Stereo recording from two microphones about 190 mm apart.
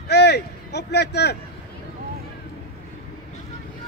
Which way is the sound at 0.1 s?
60° left (ahead or behind).